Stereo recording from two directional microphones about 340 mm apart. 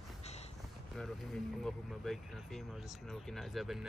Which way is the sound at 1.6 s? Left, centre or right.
Centre.